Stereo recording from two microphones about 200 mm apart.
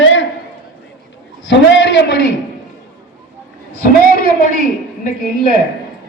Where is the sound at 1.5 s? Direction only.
65° left (ahead or behind).